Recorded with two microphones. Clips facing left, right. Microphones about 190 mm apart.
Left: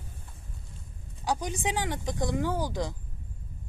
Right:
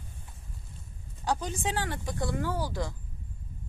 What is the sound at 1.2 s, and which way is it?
Speech, 15° left (ahead or behind).